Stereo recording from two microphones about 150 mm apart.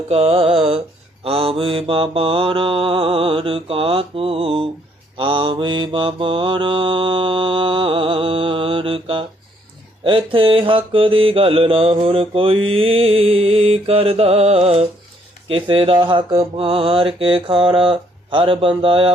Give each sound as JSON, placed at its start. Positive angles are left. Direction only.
{"t": 0.1, "sound": "mantra", "side_deg": -40}